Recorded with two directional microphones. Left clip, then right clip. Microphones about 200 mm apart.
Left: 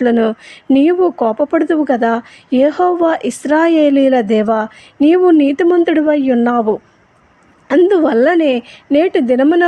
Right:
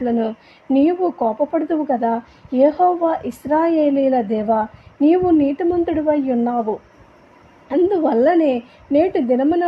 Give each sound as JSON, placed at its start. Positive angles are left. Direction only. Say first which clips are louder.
{"t": 0.0, "sound": "speech", "louder": "left 8 dB", "side_deg": 25}